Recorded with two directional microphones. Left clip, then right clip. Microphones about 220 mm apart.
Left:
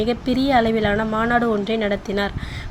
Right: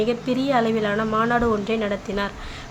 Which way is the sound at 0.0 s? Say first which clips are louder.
Left 2 dB; 15° left (ahead or behind).